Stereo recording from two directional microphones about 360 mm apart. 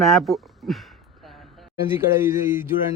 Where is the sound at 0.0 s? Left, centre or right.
Centre.